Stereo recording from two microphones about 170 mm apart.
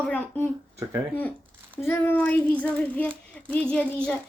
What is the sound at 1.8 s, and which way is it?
Child singing, 15° left (ahead or behind).